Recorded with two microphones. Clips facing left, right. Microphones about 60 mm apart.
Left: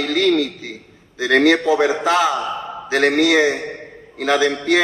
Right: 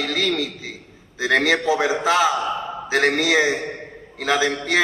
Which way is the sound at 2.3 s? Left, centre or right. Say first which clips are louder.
Even; centre.